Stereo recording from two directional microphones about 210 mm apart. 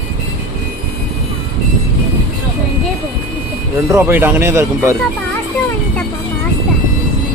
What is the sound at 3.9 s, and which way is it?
Speech, 10° right (ahead or behind).